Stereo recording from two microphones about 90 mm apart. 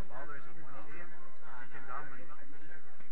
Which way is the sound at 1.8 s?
15° right (ahead or behind).